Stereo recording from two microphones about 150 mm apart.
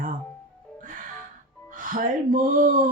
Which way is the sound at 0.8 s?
60° right (ahead or behind).